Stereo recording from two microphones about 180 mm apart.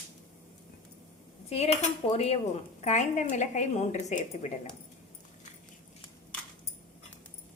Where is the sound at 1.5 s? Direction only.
35° left (ahead or behind).